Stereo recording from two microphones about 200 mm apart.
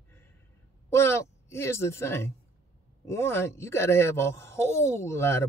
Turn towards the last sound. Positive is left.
turn(degrees=15)  # may be behind; listen again after turning